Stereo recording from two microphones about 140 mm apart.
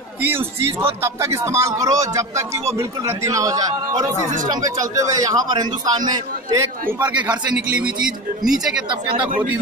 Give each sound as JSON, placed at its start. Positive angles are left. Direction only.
{"t": 0.2, "sound": "speech", "side_deg": -15}
{"t": 7.1, "sound": "a man's voice", "side_deg": -10}